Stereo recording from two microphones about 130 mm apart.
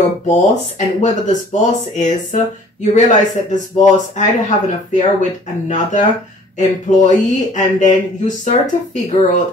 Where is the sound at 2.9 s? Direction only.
70° left (ahead or behind).